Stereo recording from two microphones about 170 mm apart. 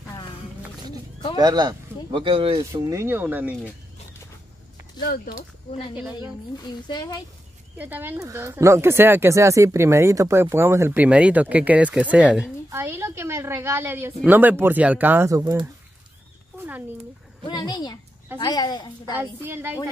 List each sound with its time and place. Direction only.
1.4 s speech: 25° right (ahead or behind)
2.7 s speech: 15° right (ahead or behind)
5.0 s speech: 60° left (ahead or behind)
6.6 s a woman's voice: 25° left (ahead or behind)
7.7 s speech: 10° right (ahead or behind)
17.5 s a woman's voice: 25° left (ahead or behind)
19.1 s speech: 15° right (ahead or behind)